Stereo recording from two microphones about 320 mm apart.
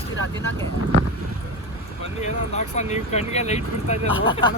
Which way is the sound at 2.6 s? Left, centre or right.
Left.